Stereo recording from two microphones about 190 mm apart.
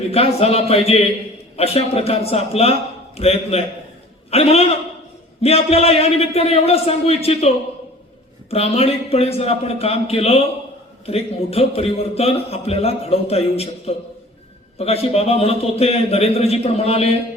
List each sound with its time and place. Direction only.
0.1 s a man's voice: 30° left (ahead or behind)